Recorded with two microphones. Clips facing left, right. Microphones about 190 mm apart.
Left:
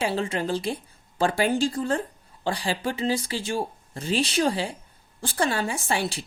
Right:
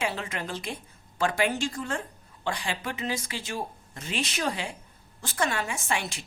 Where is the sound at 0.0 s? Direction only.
30° left (ahead or behind).